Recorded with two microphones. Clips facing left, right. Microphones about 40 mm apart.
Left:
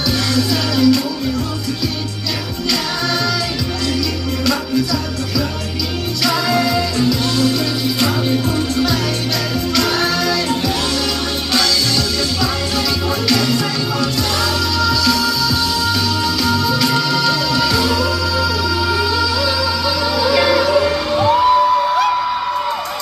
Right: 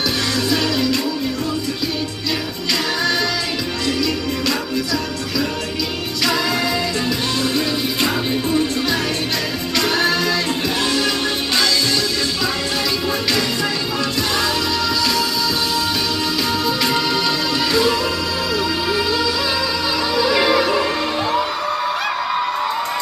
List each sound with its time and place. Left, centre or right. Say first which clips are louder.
0.3 s music: left 2 dB; right
6.2 s music: left 3 dB; right
8.0 s music: left 3 dB; centre
13.2 s music: left 4 dB; right
14.8 s music: left 3 dB; right
16.4 s music: left 3 dB; right